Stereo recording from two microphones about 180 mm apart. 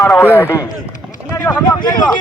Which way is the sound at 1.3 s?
15° left (ahead or behind).